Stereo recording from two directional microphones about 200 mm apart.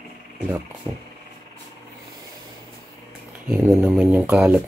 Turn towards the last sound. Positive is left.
turn(degrees=-5)  # may be behind; listen again after turning